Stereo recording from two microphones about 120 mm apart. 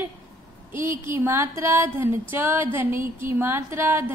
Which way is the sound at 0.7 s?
45° left (ahead or behind).